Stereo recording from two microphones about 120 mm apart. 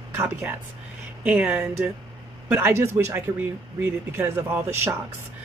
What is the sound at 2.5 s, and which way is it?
A woman's voice, 20° right (ahead or behind).